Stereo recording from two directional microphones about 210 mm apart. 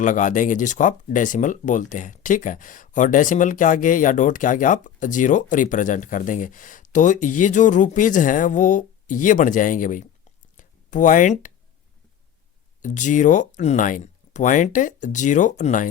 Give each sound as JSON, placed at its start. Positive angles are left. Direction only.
{"t": 0.0, "sound": "speech", "side_deg": 40}
{"t": 10.6, "sound": "a sound", "side_deg": 40}
{"t": 12.8, "sound": "speech", "side_deg": 35}